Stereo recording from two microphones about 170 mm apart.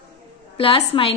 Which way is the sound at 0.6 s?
35° left (ahead or behind).